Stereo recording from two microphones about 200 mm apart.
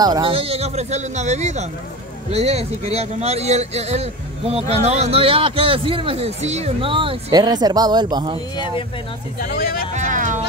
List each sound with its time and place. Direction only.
0.0 s speech: 25° right (ahead or behind)
8.5 s speech: 25° left (ahead or behind)
9.4 s speech: 50° left (ahead or behind)
9.9 s speech: 40° right (ahead or behind)